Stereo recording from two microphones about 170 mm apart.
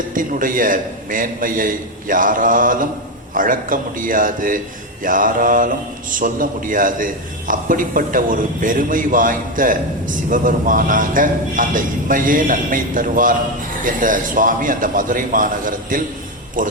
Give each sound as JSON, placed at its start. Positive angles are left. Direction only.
{"t": 0.1, "sound": "a man's voice", "side_deg": -50}